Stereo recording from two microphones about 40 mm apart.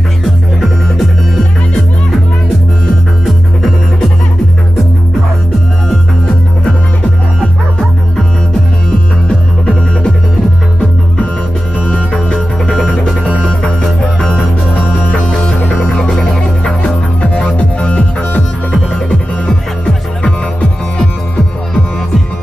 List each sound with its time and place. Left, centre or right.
0.2 s music: centre
11.8 s music: left
13.2 s music: right
15.3 s music: centre